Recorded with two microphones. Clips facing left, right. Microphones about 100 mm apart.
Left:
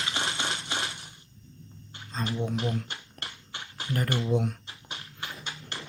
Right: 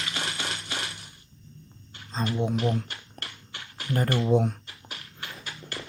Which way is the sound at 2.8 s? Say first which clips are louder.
Even; 25° left (ahead or behind).